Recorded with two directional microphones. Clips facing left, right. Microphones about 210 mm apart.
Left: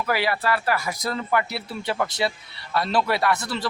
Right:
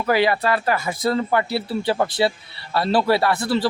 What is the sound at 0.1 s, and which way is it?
A man's voice, 20° right (ahead or behind).